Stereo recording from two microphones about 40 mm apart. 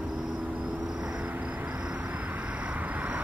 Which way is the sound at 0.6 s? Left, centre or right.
Centre.